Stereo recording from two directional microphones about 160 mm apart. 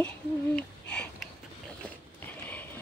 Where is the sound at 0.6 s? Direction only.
5° left (ahead or behind).